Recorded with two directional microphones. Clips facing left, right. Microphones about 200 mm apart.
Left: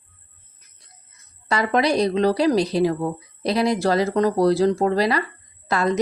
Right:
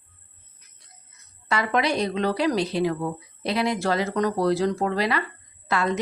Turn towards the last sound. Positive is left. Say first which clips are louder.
# left 3 dB
turn(degrees=40)  # may be behind; listen again after turning